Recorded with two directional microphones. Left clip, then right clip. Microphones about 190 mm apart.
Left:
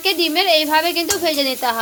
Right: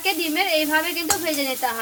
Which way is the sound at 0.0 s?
40° left (ahead or behind).